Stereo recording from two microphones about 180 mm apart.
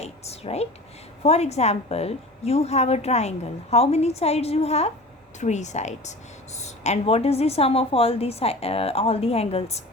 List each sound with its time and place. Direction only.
0.0 s a woman's voice: 35° left (ahead or behind)